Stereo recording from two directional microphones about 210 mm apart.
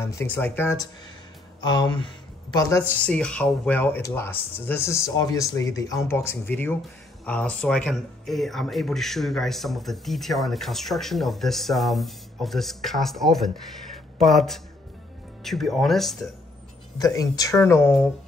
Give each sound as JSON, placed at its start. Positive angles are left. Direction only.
{"t": 0.0, "sound": "speech", "side_deg": 10}
{"t": 17.0, "sound": "speech", "side_deg": 15}